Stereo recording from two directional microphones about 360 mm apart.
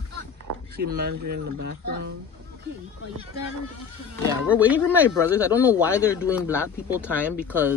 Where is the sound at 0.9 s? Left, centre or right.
Right.